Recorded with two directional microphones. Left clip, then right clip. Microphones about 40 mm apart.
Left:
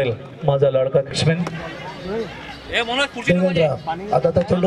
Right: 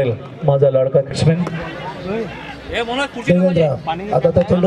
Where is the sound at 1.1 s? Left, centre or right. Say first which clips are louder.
Right 2 dB; left.